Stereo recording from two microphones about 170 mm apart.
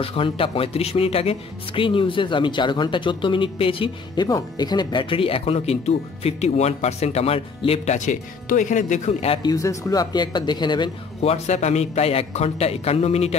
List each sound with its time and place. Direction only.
0.0 s speech: 35° left (ahead or behind)
9.4 s speech: 20° left (ahead or behind)
11.1 s speech: 40° left (ahead or behind)